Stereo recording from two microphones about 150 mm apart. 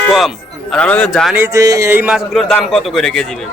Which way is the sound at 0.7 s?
5° left (ahead or behind).